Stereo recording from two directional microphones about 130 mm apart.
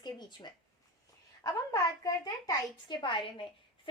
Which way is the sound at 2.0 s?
30° left (ahead or behind).